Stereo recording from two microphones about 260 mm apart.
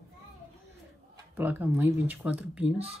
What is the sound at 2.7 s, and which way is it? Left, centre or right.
Speech, right.